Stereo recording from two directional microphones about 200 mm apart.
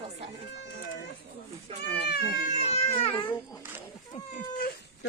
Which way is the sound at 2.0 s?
55° left (ahead or behind).